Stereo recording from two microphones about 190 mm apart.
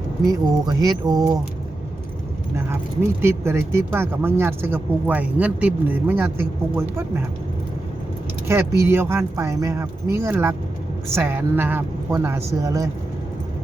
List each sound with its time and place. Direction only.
0.3 s speech: 20° right (ahead or behind)
2.6 s speech: 15° right (ahead or behind)
8.4 s speech: 15° right (ahead or behind)